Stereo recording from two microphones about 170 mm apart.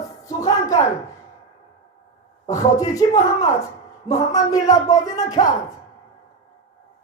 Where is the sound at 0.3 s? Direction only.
20° left (ahead or behind).